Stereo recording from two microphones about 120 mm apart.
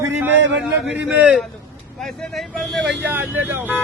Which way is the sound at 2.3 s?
Centre (ahead or behind).